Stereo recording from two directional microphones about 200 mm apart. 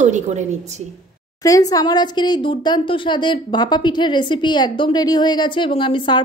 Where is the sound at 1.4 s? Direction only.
15° left (ahead or behind).